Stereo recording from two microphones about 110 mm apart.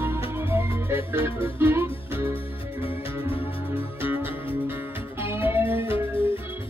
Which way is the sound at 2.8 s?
55° left (ahead or behind).